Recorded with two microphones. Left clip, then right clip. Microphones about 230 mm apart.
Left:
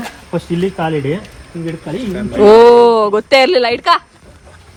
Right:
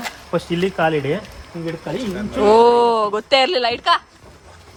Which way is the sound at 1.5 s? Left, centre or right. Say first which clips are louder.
Left 3 dB; right.